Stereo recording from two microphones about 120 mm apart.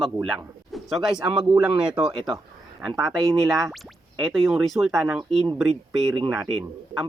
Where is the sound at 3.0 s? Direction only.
Centre (ahead or behind).